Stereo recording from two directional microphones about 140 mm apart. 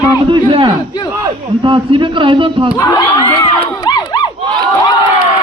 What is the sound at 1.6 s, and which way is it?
A man's voice, 40° right (ahead or behind).